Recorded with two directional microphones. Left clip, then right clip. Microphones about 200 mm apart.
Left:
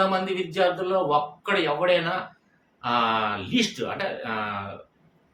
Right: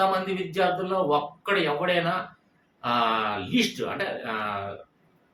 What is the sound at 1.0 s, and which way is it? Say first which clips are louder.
Speech: left 1 dB; 15° left (ahead or behind).